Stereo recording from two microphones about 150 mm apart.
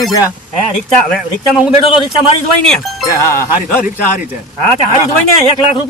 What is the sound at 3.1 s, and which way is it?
Speech, 20° left (ahead or behind).